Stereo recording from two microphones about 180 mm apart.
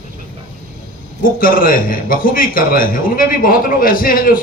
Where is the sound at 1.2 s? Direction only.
50° left (ahead or behind).